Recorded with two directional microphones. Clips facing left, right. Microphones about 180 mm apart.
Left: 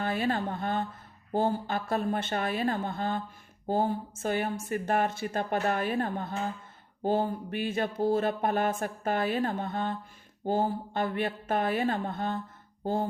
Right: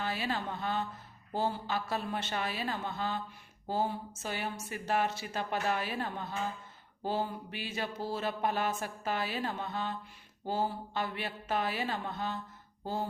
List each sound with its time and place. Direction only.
0.0 s speech: 50° left (ahead or behind)